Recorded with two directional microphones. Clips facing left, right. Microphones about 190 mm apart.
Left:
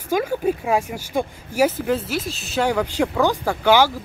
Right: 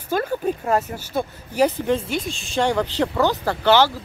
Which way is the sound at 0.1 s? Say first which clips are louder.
Left 2 dB; 10° left (ahead or behind).